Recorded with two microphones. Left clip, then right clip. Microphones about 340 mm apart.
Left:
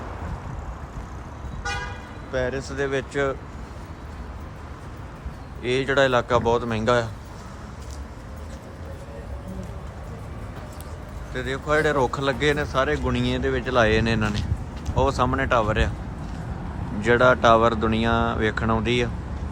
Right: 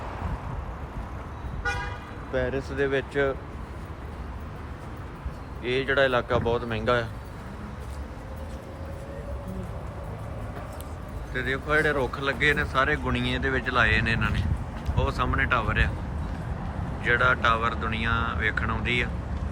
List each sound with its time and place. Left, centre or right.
2.3 s speech: centre
5.6 s speech: centre
11.3 s speech: centre
17.0 s speech: centre